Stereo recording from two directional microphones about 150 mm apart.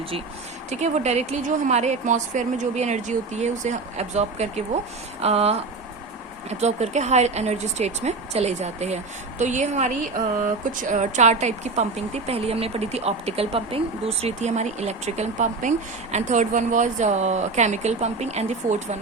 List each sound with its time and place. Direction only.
0.7 s speech: 50° right (ahead or behind)